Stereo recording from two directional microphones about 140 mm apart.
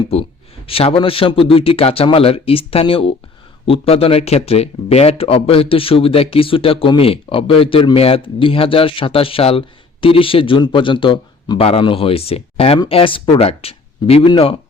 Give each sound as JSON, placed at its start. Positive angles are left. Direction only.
{"t": 0.7, "sound": "speech", "side_deg": 40}